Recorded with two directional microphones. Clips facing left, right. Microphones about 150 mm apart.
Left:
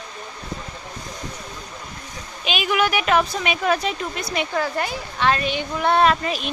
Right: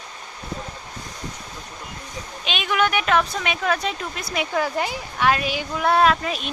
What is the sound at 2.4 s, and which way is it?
Speech, 5° left (ahead or behind).